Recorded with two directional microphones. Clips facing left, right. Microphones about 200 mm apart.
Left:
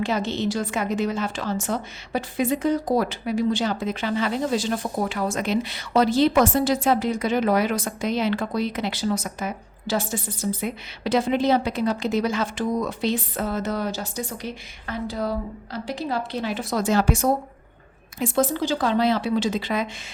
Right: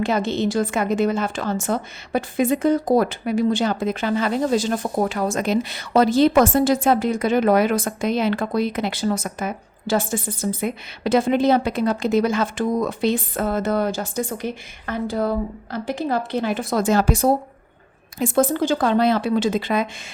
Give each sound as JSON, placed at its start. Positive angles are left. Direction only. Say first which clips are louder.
{"t": 0.0, "sound": "a woman's voice", "louder": "right 3 dB", "side_deg": -50}
{"t": 18.2, "sound": "a woman's voice", "louder": "right 4 dB", "side_deg": -50}